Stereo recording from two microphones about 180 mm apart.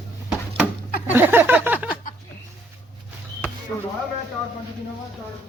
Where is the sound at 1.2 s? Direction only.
10° right (ahead or behind).